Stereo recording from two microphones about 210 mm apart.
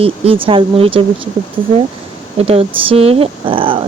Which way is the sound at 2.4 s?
30° right (ahead or behind).